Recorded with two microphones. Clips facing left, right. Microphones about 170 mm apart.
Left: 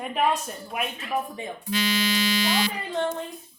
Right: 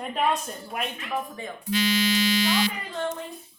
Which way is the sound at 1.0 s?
20° left (ahead or behind).